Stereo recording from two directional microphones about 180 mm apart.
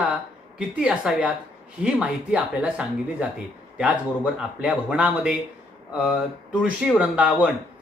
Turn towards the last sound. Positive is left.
turn(degrees=-5)  # may be behind; listen again after turning